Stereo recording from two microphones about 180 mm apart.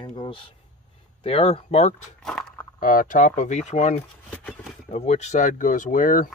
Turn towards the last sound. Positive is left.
turn(degrees=50)  # may be behind; listen again after turning